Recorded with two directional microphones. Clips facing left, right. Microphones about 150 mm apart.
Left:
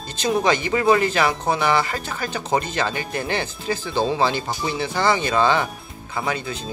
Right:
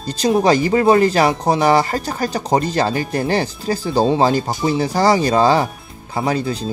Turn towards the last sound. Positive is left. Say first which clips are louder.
# right 6 dB
turn(degrees=-35)  # may be behind; listen again after turning